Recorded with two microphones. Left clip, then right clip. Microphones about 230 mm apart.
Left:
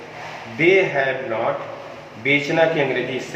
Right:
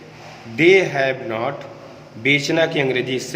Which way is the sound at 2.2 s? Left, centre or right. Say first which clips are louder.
Even; right.